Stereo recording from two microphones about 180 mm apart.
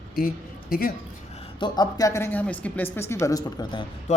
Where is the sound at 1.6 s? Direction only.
20° left (ahead or behind).